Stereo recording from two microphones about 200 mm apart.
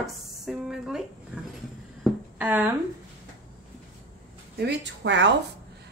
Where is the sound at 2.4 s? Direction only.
10° right (ahead or behind).